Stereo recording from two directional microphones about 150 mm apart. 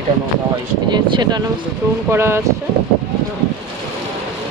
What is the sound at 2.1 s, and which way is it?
Speech, 15° right (ahead or behind).